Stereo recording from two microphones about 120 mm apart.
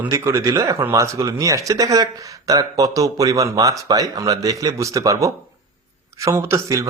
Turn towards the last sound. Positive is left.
turn(degrees=-25)  # may be behind; listen again after turning